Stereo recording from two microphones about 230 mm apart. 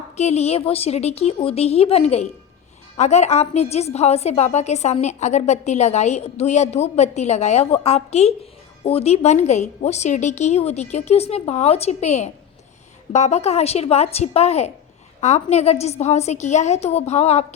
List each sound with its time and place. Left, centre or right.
0.2 s a woman's voice: left